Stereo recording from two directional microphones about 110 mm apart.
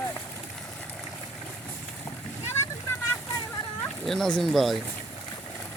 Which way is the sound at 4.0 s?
Centre (ahead or behind).